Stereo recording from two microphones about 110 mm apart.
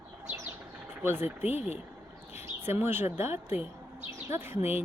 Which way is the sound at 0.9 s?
20° right (ahead or behind).